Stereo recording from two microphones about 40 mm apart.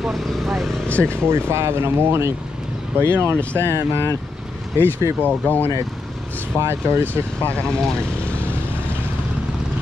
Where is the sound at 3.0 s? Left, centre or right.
Right.